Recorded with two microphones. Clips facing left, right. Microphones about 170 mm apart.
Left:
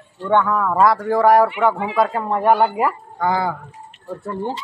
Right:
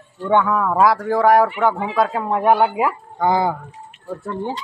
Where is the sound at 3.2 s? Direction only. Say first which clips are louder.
Right 3 dB; 20° right (ahead or behind).